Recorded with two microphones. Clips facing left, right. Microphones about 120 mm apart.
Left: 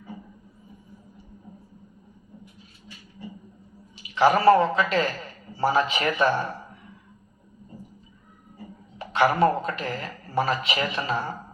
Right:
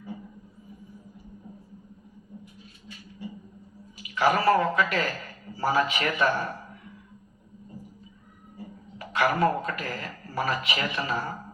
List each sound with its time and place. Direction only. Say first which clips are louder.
3.9 s a man's voice: left 4 dB; 30° left (ahead or behind)
9.0 s a man's voice: left 4 dB; 30° left (ahead or behind)